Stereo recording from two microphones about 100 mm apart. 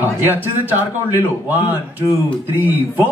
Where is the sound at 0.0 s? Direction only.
20° right (ahead or behind).